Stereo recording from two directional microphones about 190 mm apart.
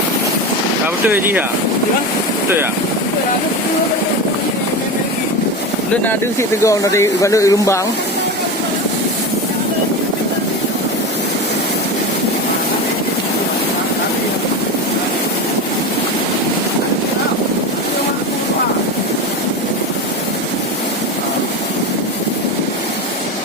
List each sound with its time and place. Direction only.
1.1 s speech: 10° right (ahead or behind)
6.6 s speech: 15° left (ahead or behind)